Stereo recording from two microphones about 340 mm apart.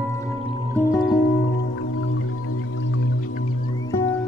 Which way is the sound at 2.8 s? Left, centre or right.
Left.